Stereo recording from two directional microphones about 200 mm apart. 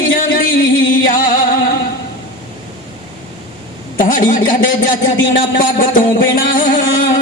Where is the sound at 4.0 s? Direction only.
40° left (ahead or behind).